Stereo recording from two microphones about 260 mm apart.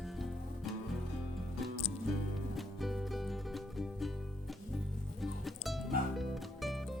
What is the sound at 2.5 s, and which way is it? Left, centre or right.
Music, centre.